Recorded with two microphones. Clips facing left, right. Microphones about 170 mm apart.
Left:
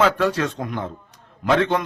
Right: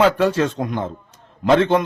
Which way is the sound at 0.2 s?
25° right (ahead or behind).